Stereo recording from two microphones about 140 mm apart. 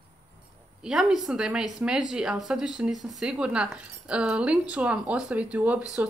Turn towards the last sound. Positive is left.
turn(degrees=-10)  # may be behind; listen again after turning